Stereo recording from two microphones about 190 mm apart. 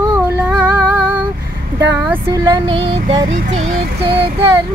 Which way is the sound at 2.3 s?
20° right (ahead or behind).